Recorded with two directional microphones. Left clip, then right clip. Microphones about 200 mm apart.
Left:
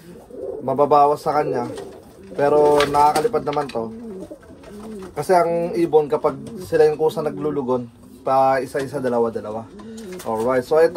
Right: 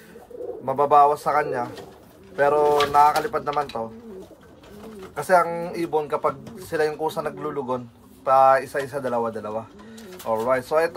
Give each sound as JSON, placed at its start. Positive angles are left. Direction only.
{"t": 0.7, "sound": "speech", "side_deg": -30}
{"t": 5.1, "sound": "speech", "side_deg": -25}